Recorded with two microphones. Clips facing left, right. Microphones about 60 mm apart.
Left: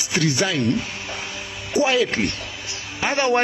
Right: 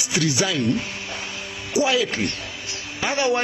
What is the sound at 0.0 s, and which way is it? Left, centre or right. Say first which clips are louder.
Speech: left 1 dB; left.